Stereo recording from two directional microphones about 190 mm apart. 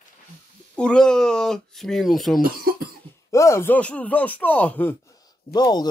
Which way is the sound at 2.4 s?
50° right (ahead or behind).